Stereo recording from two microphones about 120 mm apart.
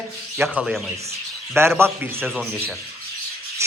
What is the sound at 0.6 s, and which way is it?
Speech, 5° right (ahead or behind).